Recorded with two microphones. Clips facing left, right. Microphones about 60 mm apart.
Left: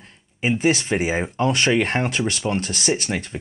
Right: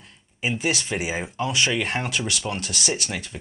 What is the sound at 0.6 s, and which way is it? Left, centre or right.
Speech, left.